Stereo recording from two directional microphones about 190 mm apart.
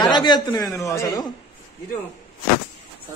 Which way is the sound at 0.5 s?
20° left (ahead or behind).